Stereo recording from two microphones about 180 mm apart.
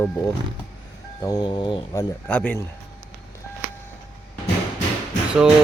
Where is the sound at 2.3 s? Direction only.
10° left (ahead or behind).